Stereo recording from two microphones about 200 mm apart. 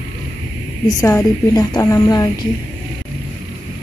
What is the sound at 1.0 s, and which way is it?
Speech, 15° left (ahead or behind).